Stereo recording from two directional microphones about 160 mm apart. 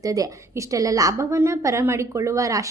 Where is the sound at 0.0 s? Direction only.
20° right (ahead or behind).